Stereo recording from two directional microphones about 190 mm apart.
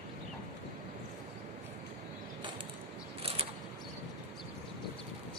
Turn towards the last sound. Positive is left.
turn(degrees=-30)  # may be behind; listen again after turning